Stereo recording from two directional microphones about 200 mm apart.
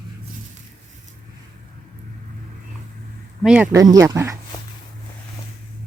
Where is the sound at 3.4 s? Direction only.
5° right (ahead or behind).